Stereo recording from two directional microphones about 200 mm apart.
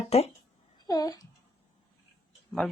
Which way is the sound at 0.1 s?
30° left (ahead or behind).